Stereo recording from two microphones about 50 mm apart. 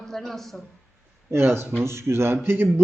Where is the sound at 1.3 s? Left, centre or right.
Right.